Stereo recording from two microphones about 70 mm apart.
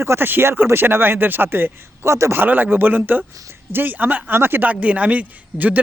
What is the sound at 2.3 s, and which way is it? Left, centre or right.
A man's voice, right.